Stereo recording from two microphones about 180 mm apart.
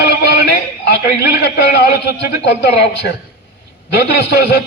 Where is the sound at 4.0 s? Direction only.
70° left (ahead or behind).